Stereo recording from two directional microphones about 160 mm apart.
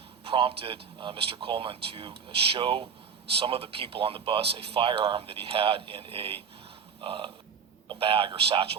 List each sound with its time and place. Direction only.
0.3 s speech: 35° right (ahead or behind)